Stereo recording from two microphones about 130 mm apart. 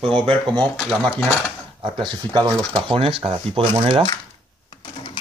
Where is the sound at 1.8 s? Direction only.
40° right (ahead or behind).